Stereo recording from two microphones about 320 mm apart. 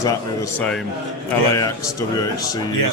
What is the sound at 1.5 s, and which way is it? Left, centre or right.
Speech, centre.